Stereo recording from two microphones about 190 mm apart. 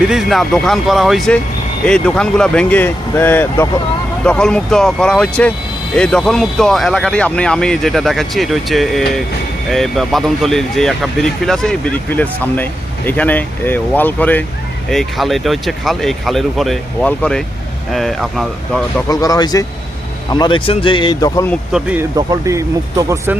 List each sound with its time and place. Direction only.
0.0 s speech: 5° right (ahead or behind)
19.0 s speech: 20° left (ahead or behind)
21.5 s speech: 5° right (ahead or behind)
22.3 s speech: 15° right (ahead or behind)